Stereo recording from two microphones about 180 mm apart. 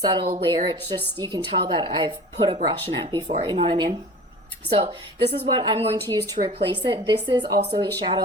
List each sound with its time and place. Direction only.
0.0 s a woman's voice: 25° right (ahead or behind)